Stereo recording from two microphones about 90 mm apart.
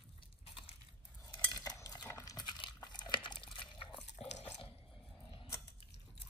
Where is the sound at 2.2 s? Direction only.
40° left (ahead or behind).